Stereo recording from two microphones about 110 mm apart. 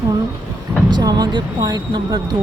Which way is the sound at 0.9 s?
40° right (ahead or behind).